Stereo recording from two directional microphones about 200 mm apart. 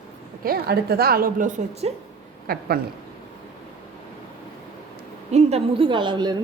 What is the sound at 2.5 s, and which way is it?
Speech, 50° right (ahead or behind).